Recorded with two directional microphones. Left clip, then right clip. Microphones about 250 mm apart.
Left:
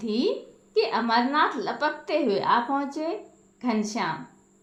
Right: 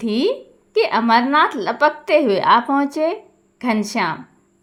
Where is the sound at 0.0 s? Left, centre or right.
Right.